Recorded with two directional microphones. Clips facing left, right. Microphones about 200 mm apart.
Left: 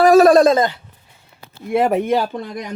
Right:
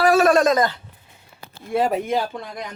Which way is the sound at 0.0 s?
40° left (ahead or behind).